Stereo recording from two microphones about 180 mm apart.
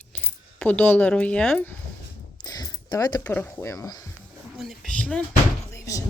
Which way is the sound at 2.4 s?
20° left (ahead or behind).